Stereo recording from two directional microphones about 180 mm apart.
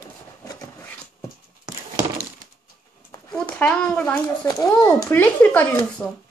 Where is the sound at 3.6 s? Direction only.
5° left (ahead or behind).